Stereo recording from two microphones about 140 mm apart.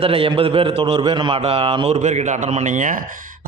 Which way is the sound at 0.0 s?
40° right (ahead or behind).